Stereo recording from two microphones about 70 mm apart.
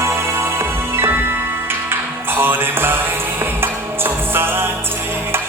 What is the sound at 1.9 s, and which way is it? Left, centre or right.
Music, right.